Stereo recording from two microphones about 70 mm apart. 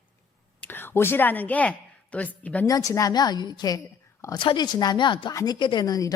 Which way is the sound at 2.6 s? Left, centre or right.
Left.